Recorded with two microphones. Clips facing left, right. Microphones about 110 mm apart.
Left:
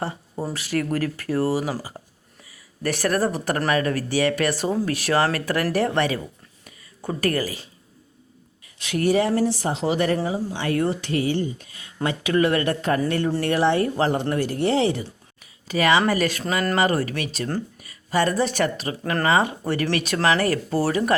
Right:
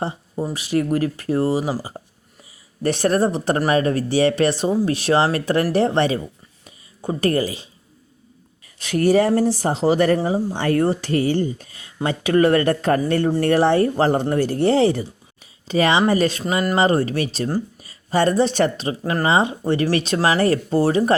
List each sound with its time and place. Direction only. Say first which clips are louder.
0.5 s speech: right 4 dB; 20° right (ahead or behind)
2.0 s a sound: right 4 dB; 25° right (ahead or behind)
2.8 s speech: right 4 dB; 25° right (ahead or behind)
6.7 s a sound: right 4 dB; 25° right (ahead or behind)
8.8 s speech: right 4 dB; 40° right (ahead or behind)
15.6 s speech: right 2 dB; 25° right (ahead or behind)